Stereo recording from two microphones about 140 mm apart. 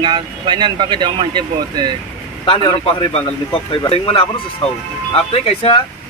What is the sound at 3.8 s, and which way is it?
A man's voice, 40° left (ahead or behind).